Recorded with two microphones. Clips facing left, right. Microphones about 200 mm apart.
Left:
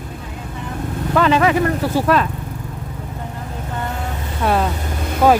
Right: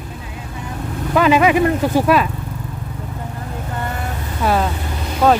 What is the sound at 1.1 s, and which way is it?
Speech, 10° right (ahead or behind).